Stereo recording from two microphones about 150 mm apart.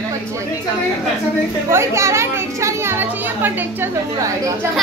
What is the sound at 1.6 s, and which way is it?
Speech, 20° right (ahead or behind).